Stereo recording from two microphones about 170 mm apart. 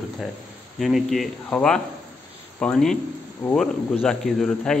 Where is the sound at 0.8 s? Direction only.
Centre (ahead or behind).